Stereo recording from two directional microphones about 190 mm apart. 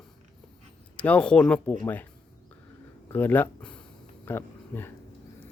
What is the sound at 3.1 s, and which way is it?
Speech, 10° left (ahead or behind).